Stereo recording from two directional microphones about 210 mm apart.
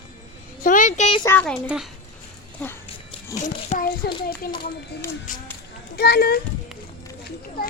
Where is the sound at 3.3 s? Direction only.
35° left (ahead or behind).